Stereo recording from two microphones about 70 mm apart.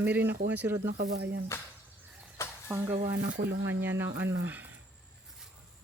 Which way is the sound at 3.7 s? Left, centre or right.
Right.